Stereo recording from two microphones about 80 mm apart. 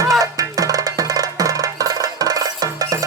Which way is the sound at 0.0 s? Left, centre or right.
Right.